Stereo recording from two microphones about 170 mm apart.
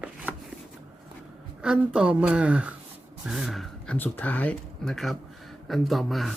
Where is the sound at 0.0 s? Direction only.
10° right (ahead or behind).